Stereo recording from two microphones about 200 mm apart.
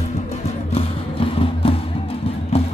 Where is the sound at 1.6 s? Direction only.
30° left (ahead or behind).